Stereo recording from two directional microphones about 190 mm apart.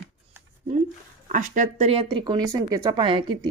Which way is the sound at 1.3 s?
40° right (ahead or behind).